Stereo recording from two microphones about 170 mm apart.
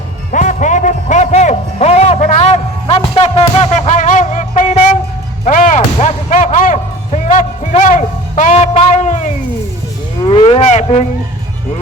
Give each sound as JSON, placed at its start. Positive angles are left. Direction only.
{"t": 0.3, "sound": "music", "side_deg": 45}
{"t": 10.2, "sound": "cattle", "side_deg": 30}